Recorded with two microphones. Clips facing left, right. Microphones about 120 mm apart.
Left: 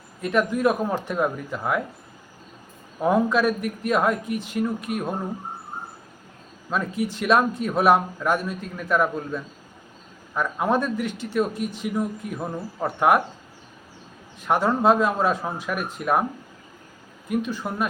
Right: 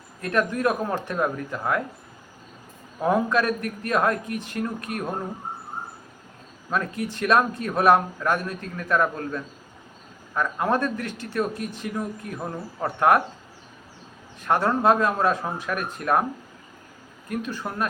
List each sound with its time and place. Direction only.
0.2 s speech: 10° left (ahead or behind)
3.0 s speech: 5° left (ahead or behind)
6.7 s speech: 10° left (ahead or behind)
14.4 s speech: 10° left (ahead or behind)
17.2 s speech: 10° left (ahead or behind)